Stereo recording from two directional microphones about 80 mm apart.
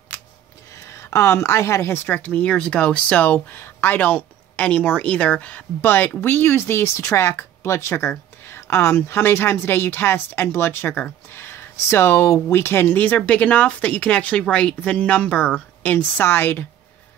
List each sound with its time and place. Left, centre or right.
0.8 s a woman's voice: left